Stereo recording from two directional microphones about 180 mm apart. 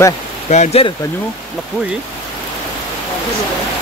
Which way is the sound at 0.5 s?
35° left (ahead or behind).